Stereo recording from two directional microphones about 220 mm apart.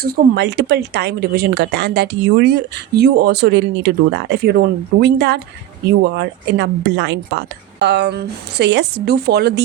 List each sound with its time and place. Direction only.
0.0 s speech: 45° right (ahead or behind)